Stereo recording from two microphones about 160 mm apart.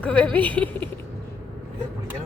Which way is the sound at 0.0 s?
10° left (ahead or behind).